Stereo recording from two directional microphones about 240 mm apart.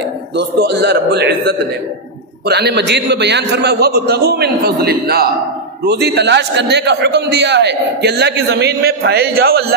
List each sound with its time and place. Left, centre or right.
0.4 s a man's voice: right